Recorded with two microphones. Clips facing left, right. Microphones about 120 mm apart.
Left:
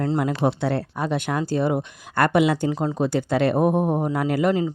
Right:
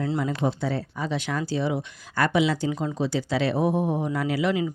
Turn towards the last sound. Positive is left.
turn(degrees=50)  # may be behind; listen again after turning